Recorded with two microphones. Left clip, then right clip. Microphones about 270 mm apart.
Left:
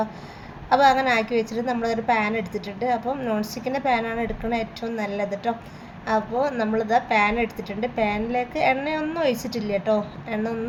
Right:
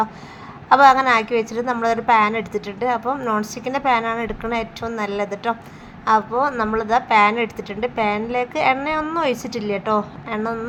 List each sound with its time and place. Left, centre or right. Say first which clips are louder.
0.7 s a woman's voice: right 5 dB; centre